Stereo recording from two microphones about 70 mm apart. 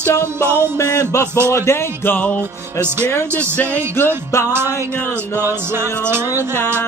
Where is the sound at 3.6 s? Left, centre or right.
Left.